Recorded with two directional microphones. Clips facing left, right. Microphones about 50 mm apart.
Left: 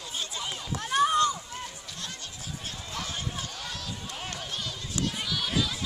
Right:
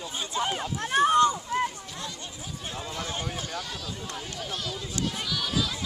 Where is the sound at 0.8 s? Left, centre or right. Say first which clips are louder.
Right 3 dB; right.